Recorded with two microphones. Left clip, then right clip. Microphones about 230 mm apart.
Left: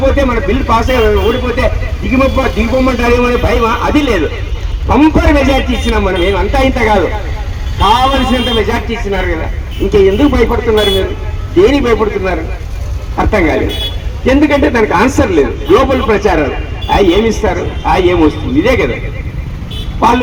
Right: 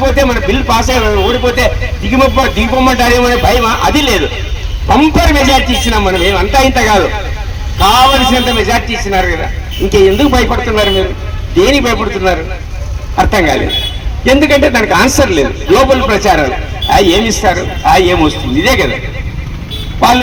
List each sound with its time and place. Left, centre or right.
0.0 s speech: right